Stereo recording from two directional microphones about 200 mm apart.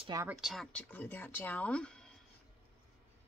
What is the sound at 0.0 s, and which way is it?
Speech, 20° right (ahead or behind).